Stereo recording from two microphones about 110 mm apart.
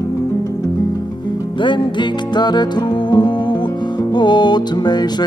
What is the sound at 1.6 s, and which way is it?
Music, 45° left (ahead or behind).